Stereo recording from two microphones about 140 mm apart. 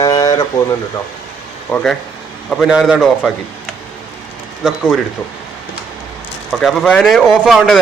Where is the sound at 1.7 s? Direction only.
10° left (ahead or behind).